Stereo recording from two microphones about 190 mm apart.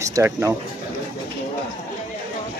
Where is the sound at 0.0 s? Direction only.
15° right (ahead or behind).